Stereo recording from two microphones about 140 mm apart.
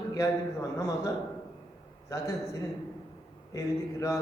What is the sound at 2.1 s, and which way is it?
A man's voice, 20° left (ahead or behind).